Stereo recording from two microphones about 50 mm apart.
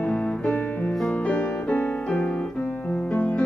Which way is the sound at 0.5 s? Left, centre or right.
Left.